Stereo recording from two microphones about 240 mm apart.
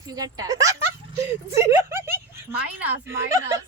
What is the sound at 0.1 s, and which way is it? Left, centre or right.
Speech, centre.